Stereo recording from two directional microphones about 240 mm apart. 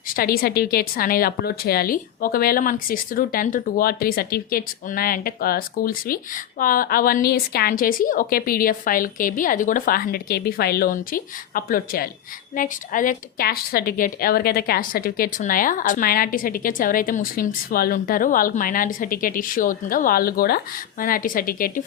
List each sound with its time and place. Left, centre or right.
0.1 s a woman's voice: left